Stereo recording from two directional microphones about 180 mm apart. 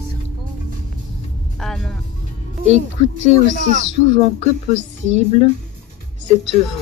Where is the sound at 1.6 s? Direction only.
5° left (ahead or behind).